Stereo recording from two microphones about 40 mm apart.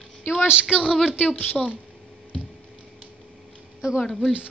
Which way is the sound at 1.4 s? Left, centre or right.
Left.